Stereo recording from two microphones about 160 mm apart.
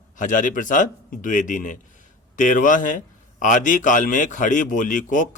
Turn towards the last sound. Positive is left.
turn(degrees=55)  # may be behind; listen again after turning